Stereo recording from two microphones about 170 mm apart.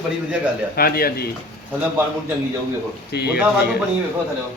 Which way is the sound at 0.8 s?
60° left (ahead or behind).